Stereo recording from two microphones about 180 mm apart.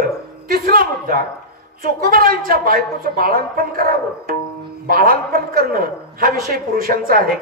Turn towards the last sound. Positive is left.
turn(degrees=-55)  # may be behind; listen again after turning